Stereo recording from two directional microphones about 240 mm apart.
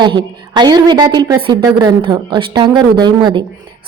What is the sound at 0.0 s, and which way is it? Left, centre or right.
A woman's voice, centre.